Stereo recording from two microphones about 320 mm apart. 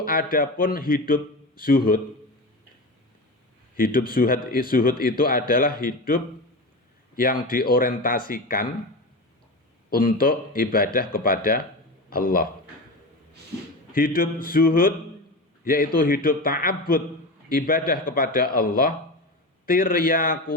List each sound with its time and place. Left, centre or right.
0.0 s speech: left
3.8 s speech: left
9.9 s speech: left
13.9 s speech: left